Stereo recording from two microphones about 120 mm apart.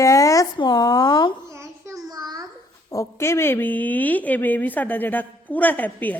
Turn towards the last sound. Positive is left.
turn(degrees=15)  # may be behind; listen again after turning